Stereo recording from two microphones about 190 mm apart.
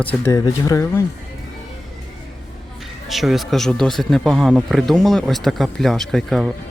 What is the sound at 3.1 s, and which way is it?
Speech, centre (ahead or behind).